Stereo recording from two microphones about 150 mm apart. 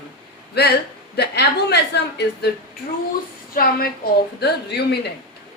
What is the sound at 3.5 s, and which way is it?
A woman's voice, 85° left.